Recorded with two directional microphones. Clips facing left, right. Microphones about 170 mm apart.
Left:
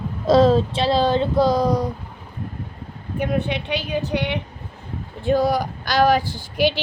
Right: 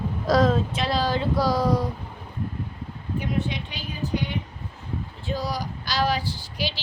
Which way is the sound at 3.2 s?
65° left (ahead or behind).